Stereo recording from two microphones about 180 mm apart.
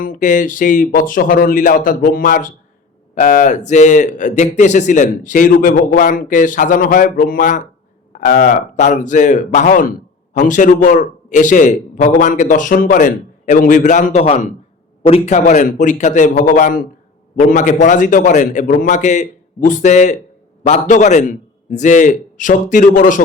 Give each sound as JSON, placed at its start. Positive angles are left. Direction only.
{"t": 0.0, "sound": "a man's voice", "side_deg": 45}
{"t": 15.4, "sound": "speech", "side_deg": 45}